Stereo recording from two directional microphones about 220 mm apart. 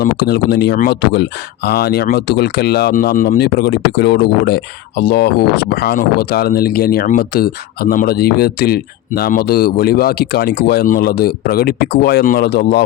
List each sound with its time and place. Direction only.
0.0 s speech: 45° left (ahead or behind)